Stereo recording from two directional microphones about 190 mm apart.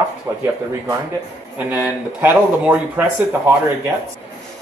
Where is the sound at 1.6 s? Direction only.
10° right (ahead or behind).